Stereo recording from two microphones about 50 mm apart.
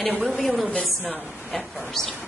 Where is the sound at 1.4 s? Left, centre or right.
Centre.